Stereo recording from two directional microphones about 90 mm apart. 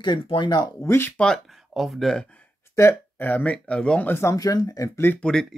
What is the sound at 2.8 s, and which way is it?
Speech, 35° left (ahead or behind).